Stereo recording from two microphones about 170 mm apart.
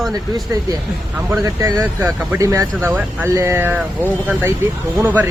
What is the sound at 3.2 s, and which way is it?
Speech, 15° right (ahead or behind).